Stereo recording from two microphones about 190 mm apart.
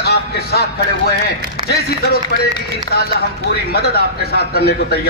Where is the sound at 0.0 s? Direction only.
55° left (ahead or behind).